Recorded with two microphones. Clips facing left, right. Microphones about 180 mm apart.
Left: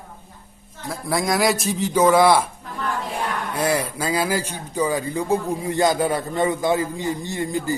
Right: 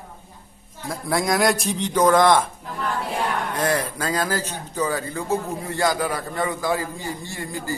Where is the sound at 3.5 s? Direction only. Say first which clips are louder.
Left 1 dB; 10° left (ahead or behind).